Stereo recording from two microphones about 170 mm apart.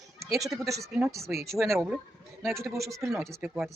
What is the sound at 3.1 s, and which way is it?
Speech, centre (ahead or behind).